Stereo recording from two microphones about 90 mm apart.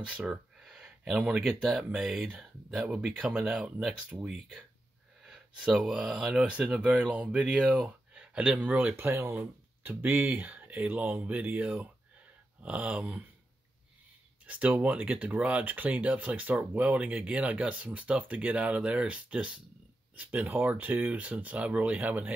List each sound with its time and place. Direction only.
0.0 s speech: 10° right (ahead or behind)
8.9 s speech: 25° right (ahead or behind)
14.4 s speech: 15° right (ahead or behind)